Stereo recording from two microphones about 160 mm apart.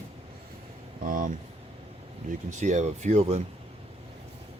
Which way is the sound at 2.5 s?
50° right (ahead or behind).